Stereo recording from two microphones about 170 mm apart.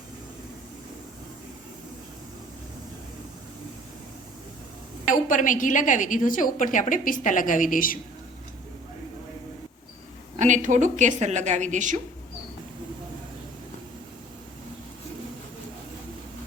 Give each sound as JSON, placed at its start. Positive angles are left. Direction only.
{"t": 5.0, "sound": "a woman's voice", "side_deg": 50}
{"t": 10.3, "sound": "a woman's voice", "side_deg": -45}